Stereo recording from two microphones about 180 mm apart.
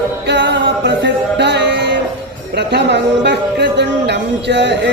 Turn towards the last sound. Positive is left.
turn(degrees=-75)  # may be behind; listen again after turning